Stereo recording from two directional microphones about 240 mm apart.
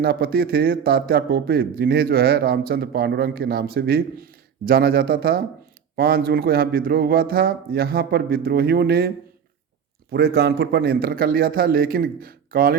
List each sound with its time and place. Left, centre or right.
0.0 s a man's voice: right